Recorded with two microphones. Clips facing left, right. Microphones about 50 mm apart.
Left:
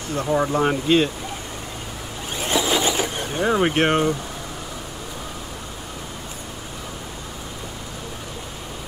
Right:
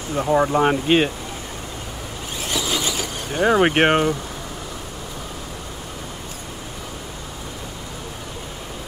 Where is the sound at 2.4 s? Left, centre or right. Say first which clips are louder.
Left 4 dB; left.